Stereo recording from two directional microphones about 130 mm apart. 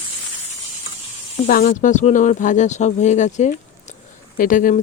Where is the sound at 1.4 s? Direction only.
90° left; by 3.5 s 70° left (ahead or behind).